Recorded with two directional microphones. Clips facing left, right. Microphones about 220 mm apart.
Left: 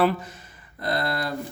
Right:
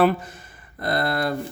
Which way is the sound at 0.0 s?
50° right (ahead or behind).